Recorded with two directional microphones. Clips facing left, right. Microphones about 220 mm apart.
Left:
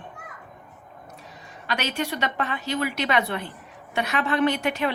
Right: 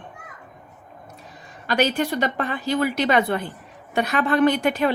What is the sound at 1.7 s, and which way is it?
A woman's voice, 50° right (ahead or behind).